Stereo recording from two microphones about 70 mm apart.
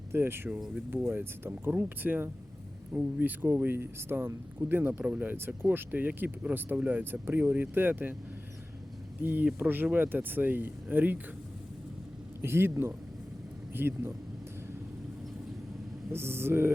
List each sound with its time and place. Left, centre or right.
0.1 s speech: right
9.2 s speech: right
12.4 s speech: right
16.1 s speech: right